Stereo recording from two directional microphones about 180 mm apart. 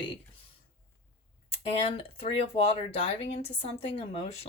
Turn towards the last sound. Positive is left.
turn(degrees=35)  # may be behind; listen again after turning